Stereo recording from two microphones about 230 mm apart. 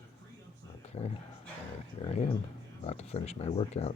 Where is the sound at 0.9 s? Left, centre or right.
Left.